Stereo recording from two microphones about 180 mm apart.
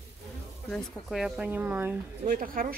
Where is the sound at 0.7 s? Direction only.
Centre (ahead or behind).